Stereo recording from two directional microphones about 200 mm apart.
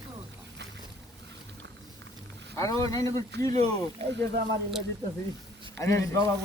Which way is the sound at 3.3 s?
55° right (ahead or behind).